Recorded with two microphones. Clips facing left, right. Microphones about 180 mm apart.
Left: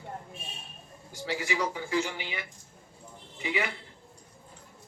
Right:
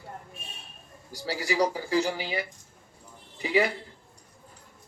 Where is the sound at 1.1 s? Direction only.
35° right (ahead or behind).